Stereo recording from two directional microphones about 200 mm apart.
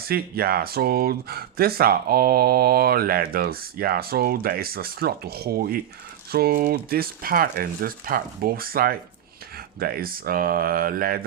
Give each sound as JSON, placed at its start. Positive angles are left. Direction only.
{"t": 0.0, "sound": "speech", "side_deg": -50}